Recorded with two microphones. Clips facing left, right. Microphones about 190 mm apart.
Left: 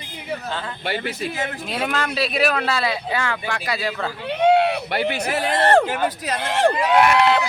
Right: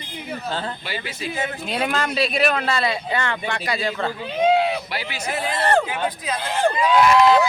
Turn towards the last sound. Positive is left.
turn(degrees=65)  # may be behind; listen again after turning